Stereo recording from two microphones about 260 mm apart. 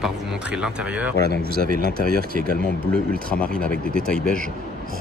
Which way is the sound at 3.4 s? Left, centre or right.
Centre.